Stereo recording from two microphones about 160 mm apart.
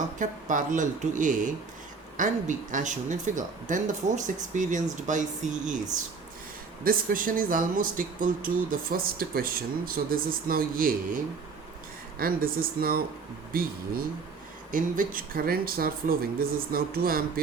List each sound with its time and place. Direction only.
0.2 s speech: 55° right (ahead or behind)
6.8 s speech: 60° right (ahead or behind)
12.2 s speech: 65° right (ahead or behind)